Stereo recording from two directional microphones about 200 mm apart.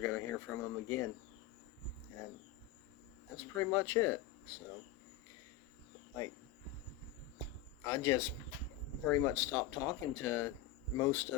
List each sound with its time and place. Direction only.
0.0 s speech: 10° left (ahead or behind)
3.3 s speech: 10° left (ahead or behind)
7.9 s speech: 15° left (ahead or behind)